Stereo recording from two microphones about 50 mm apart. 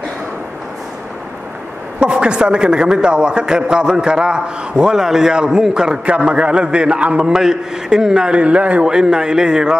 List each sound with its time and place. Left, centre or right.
2.0 s a man's voice: centre
8.8 s a man's voice: centre